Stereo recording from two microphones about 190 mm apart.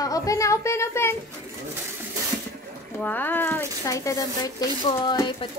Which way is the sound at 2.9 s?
10° left (ahead or behind).